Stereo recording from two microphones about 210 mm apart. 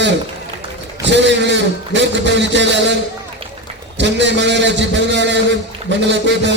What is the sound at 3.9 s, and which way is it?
A man's voice, 55° right (ahead or behind).